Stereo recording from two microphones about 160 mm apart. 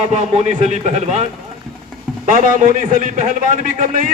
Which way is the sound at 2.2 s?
55° right (ahead or behind).